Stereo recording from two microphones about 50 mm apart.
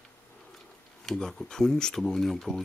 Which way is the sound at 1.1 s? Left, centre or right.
Centre.